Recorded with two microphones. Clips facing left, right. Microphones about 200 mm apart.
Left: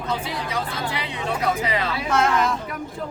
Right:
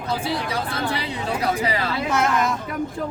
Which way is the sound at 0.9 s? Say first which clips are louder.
Right 1 dB; 35° right (ahead or behind).